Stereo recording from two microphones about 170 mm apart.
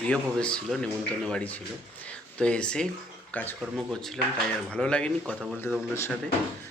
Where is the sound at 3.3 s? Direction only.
10° left (ahead or behind).